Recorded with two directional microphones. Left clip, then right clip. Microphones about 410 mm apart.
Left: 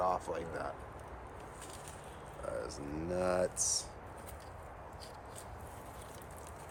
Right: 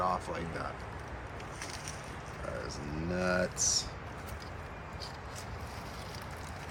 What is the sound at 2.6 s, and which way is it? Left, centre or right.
Speech, left.